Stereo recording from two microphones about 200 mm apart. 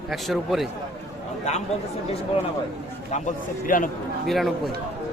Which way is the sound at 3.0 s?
35° left (ahead or behind).